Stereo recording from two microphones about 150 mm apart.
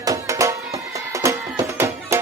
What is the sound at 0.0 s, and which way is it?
Music, 20° right (ahead or behind).